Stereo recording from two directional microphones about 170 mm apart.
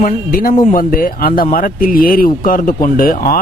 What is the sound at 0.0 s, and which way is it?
Speech, 55° left (ahead or behind).